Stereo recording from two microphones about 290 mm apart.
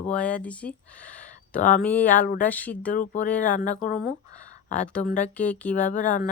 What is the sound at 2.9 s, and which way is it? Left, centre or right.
Speech, left.